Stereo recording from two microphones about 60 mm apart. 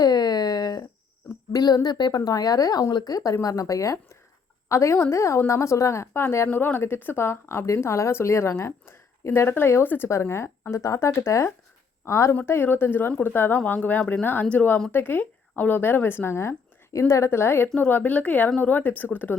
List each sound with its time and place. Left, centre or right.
0.0 s a sound: left
1.5 s a woman's voice: left
3.4 s a woman's voice: left
4.7 s a woman's voice: left
9.8 s speech: left
10.1 s a woman's voice: left
12.5 s a woman's voice: left